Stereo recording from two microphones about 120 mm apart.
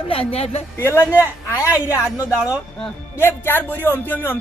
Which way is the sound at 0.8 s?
20° left (ahead or behind).